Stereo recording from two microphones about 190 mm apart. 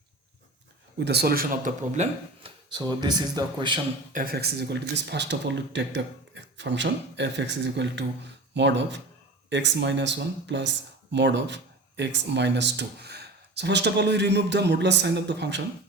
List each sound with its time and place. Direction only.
0.9 s speech: 60° right (ahead or behind); by 2.5 s 40° right (ahead or behind)
2.7 s speech: 20° right (ahead or behind)
4.1 s speech: 50° right (ahead or behind); by 15.6 s 65° right (ahead or behind)